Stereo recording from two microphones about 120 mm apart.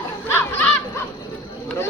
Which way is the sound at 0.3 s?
15° left (ahead or behind).